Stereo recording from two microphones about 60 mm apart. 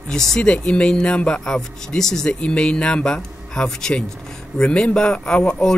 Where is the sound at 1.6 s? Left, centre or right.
Centre.